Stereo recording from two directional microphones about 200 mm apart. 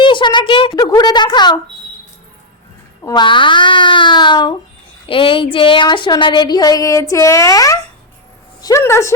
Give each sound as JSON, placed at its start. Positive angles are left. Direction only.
{"t": 0.0, "sound": "a child's voice", "side_deg": 25}
{"t": 3.0, "sound": "a woman's voice", "side_deg": 20}